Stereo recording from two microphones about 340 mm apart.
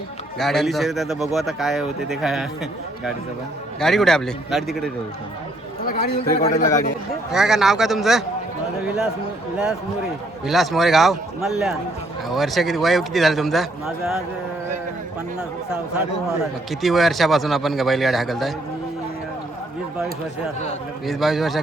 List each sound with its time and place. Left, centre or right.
0.3 s speech: centre
3.8 s speech: centre
5.8 s a man's voice: left
7.3 s speech: centre
10.4 s speech: centre
16.4 s speech: centre
21.1 s speech: centre